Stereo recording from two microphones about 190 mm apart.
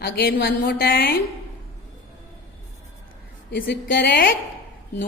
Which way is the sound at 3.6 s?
50° left (ahead or behind).